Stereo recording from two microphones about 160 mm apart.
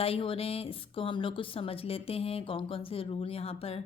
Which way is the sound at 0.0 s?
35° left (ahead or behind).